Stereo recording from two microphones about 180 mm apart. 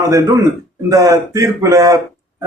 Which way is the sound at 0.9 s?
15° right (ahead or behind).